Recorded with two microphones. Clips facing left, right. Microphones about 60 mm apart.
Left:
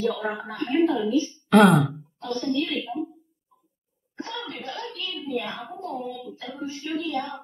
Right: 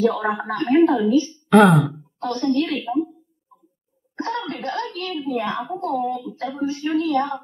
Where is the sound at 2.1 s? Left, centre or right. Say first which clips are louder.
Right 6 dB; right.